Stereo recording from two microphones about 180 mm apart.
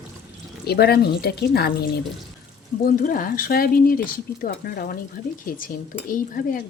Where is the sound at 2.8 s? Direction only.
50° left (ahead or behind).